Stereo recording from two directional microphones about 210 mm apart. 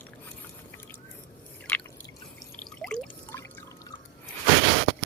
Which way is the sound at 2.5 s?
5° left (ahead or behind).